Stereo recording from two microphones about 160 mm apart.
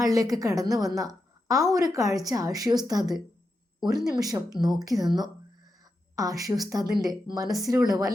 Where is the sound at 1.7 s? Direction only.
20° right (ahead or behind).